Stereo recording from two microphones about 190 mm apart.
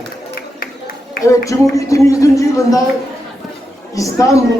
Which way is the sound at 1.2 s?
15° left (ahead or behind).